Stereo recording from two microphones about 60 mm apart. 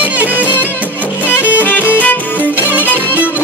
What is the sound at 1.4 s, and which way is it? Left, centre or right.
Music, left.